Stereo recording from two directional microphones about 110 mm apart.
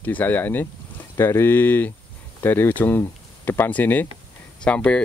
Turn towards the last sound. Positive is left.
turn(degrees=10)  # may be behind; listen again after turning